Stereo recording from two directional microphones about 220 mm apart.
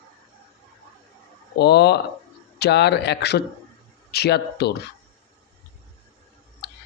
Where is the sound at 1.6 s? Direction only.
50° left (ahead or behind).